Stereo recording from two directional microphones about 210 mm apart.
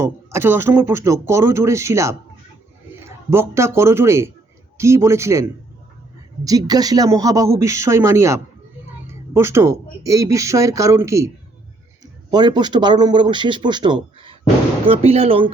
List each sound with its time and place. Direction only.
0.0 s speech: 10° right (ahead or behind)
3.2 s speech: 10° right (ahead or behind)
12.3 s speech: 20° right (ahead or behind)